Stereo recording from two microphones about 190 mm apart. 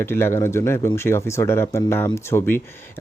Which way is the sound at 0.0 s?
10° left (ahead or behind).